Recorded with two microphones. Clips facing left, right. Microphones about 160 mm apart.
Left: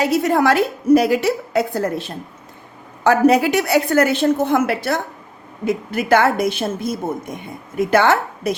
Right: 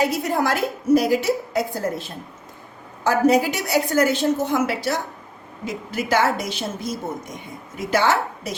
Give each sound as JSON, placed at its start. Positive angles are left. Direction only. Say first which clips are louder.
{"t": 0.0, "sound": "a woman's voice", "louder": "left 5 dB", "side_deg": 70}